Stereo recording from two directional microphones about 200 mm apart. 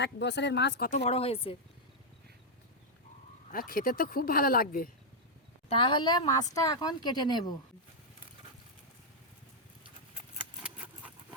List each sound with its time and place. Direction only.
0.0 s speech: 60° left (ahead or behind)
0.9 s a woman's voice: 35° left (ahead or behind)
3.5 s speech: 45° left (ahead or behind)
5.6 s a woman's voice: 25° left (ahead or behind)